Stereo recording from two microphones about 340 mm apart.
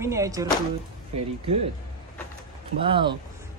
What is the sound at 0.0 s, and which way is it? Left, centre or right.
Speech, centre.